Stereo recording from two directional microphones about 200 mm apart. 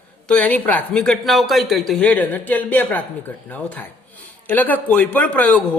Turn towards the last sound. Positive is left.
turn(degrees=5)  # may be behind; listen again after turning